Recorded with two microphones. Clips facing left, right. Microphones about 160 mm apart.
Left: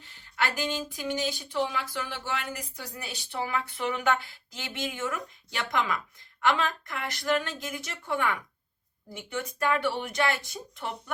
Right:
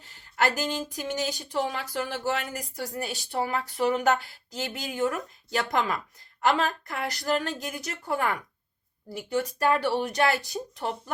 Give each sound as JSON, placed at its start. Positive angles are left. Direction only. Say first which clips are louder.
{"t": 0.0, "sound": "speech", "louder": "right 5 dB", "side_deg": -40}